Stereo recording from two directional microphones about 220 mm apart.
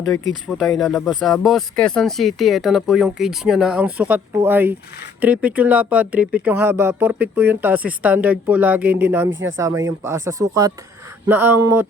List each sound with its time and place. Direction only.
0.4 s speech: centre (ahead or behind)
9.3 s speech: 60° right (ahead or behind)
9.6 s speech: 15° right (ahead or behind)